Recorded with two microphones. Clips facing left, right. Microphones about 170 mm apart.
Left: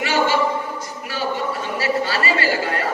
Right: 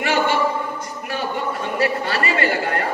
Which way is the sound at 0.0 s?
60° right (ahead or behind).